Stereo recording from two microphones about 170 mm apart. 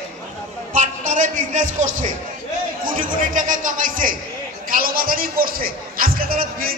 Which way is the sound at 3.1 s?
50° right (ahead or behind).